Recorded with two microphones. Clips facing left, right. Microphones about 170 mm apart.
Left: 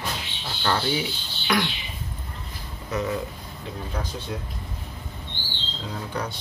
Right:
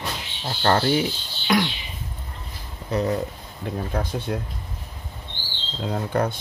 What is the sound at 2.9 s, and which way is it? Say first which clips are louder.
Speech: right 4 dB; 30° right (ahead or behind).